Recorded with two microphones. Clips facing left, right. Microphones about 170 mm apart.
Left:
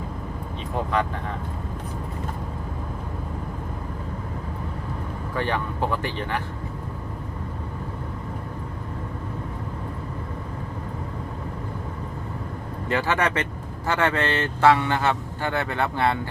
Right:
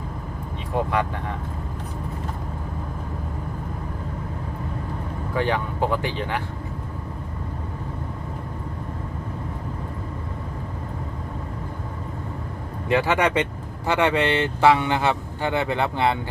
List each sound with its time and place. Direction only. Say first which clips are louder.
5.3 s speech: right 3 dB; 15° right (ahead or behind)
12.9 s speech: right 3 dB; 15° right (ahead or behind)